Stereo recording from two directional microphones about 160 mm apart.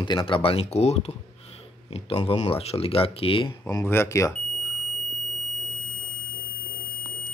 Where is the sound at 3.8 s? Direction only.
15° left (ahead or behind).